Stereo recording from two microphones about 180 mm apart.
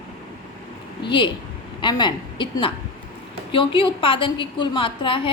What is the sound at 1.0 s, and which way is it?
A woman's voice, 25° left (ahead or behind).